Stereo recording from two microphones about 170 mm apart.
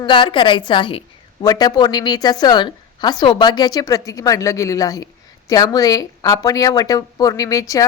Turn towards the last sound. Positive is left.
turn(degrees=20)  # may be behind; listen again after turning